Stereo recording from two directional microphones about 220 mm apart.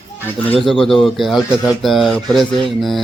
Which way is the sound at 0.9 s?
Centre (ahead or behind).